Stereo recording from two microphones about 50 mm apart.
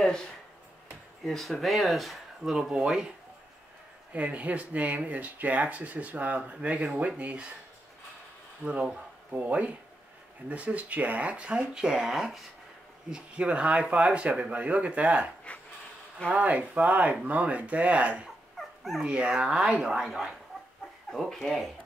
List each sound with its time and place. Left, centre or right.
1.2 s speech: centre
2.7 s speech: centre
4.1 s speech: right
9.3 s speech: right; by 12.4 s centre
13.1 s speech: right
15.5 s a sound: left
16.3 s speech: right
18.6 s dog: centre
19.0 s speech: centre
21.1 s speech: centre